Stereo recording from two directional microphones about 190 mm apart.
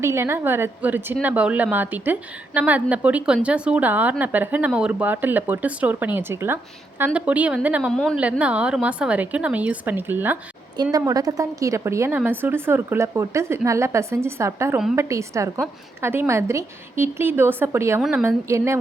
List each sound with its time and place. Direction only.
0.0 s a woman's voice: 15° right (ahead or behind)
7.9 s a woman's voice: 5° left (ahead or behind); by 18.8 s 15° right (ahead or behind)